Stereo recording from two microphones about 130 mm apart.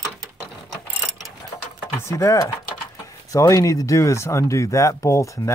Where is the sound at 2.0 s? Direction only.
25° left (ahead or behind).